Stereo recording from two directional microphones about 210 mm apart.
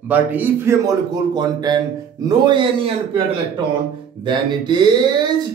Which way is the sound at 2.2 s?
20° right (ahead or behind).